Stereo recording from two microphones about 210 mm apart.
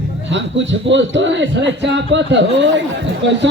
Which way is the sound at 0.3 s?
60° right (ahead or behind).